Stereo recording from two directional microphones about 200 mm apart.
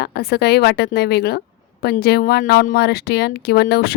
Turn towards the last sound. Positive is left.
turn(degrees=55)  # may be behind; listen again after turning